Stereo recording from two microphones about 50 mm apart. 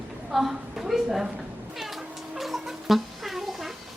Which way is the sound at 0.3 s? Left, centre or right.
Centre.